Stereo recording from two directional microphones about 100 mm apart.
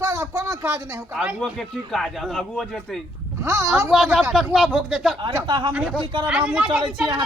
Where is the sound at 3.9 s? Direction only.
Centre (ahead or behind).